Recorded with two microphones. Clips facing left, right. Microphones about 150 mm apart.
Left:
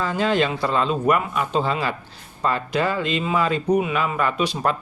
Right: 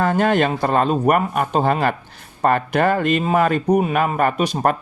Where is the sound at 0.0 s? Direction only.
55° right (ahead or behind).